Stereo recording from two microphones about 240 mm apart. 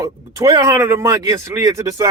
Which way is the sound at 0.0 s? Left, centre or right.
Centre.